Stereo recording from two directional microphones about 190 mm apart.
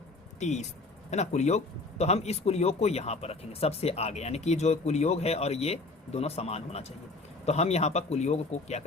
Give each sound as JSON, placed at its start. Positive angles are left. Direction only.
{"t": 0.3, "sound": "speech", "side_deg": 35}